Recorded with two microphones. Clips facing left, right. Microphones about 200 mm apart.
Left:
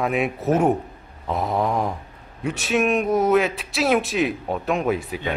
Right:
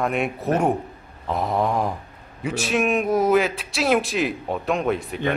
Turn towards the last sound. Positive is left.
turn(degrees=5)  # may be behind; listen again after turning